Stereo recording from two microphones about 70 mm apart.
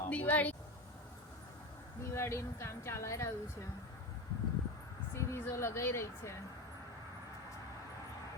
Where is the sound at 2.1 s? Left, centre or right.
Left.